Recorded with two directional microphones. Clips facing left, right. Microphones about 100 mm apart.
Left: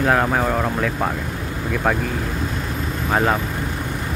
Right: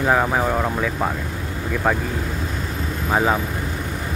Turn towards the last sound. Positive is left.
turn(degrees=-5)  # may be behind; listen again after turning